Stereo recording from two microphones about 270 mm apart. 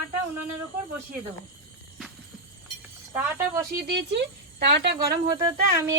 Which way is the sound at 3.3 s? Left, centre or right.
Centre.